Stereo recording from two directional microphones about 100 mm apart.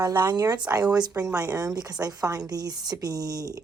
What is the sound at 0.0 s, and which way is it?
A woman's voice, 45° right (ahead or behind).